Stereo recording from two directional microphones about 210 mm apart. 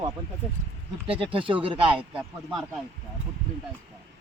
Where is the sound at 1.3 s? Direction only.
25° right (ahead or behind).